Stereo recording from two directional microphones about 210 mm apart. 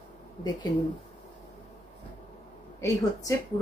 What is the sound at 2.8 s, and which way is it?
Speech, 15° left (ahead or behind).